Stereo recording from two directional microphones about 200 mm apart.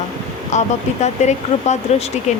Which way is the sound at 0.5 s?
35° left (ahead or behind).